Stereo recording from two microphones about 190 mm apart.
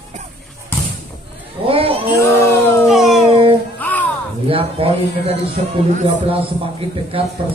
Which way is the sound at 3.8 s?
10° left (ahead or behind).